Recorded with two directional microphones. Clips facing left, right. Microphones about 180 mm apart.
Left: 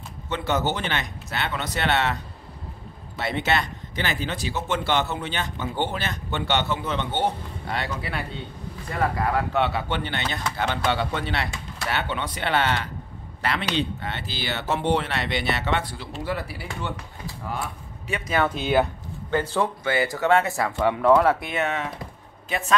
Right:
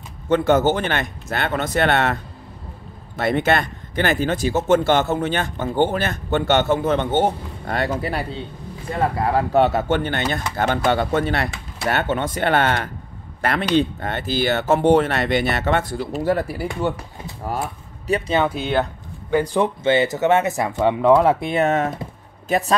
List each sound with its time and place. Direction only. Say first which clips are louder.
0.3 s speech: right 9 dB; 50° right (ahead or behind)
3.2 s speech: right 6 dB; 50° right (ahead or behind)
18.5 s speech: even; centre (ahead or behind)
19.3 s a man's voice: right 5 dB; 15° right (ahead or behind); by 22.8 s 35° right (ahead or behind)